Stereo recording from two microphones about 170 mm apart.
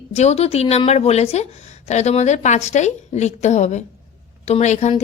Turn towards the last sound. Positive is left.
turn(degrees=40)  # may be behind; listen again after turning